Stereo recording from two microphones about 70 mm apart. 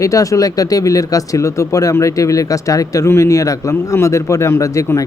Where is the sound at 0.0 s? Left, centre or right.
Left.